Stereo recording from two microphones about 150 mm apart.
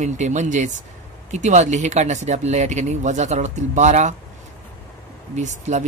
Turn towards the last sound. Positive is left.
turn(degrees=-50)  # may be behind; listen again after turning